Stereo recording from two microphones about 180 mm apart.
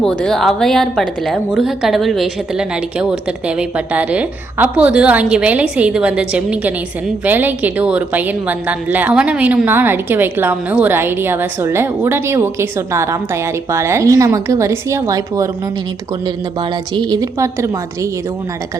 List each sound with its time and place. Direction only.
0.0 s a woman's voice: 5° left (ahead or behind); by 18.1 s 15° right (ahead or behind)